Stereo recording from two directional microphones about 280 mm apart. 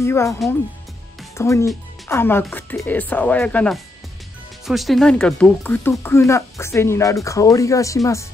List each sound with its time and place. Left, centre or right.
0.0 s speech: centre
1.4 s speech: centre